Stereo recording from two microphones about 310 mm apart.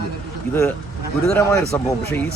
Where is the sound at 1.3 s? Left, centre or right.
Centre.